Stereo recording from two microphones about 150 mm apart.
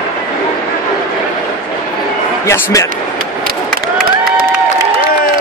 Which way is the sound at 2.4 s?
20° left (ahead or behind).